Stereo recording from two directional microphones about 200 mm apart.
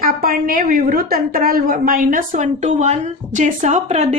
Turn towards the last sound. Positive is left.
turn(degrees=-35)  # may be behind; listen again after turning